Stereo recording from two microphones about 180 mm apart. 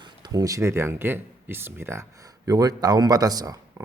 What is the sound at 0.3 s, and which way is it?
A man's voice, 20° right (ahead or behind).